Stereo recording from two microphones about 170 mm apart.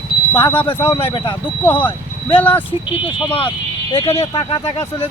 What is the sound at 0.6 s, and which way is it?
Speech, 15° left (ahead or behind).